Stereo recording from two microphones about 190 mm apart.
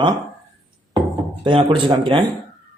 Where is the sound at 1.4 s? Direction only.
25° right (ahead or behind).